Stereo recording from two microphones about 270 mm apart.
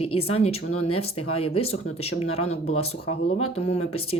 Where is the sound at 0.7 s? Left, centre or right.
Left.